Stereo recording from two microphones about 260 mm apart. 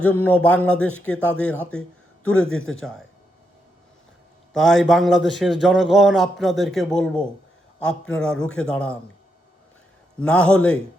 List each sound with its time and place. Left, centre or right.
0.0 s a man's voice: centre
2.5 s a man's voice: left
4.5 s a man's voice: centre
10.2 s a man's voice: centre